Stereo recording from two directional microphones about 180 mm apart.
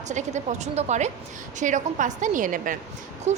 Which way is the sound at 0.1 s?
40° right (ahead or behind).